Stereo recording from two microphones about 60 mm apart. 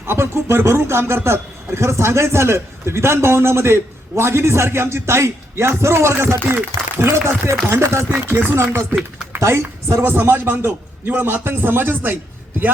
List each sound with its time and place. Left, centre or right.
0.1 s a man's voice: right
9.4 s a woman's voice: right
10.0 s a man's voice: right